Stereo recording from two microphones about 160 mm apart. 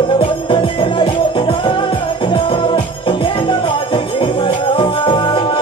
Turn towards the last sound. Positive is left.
turn(degrees=35)  # may be behind; listen again after turning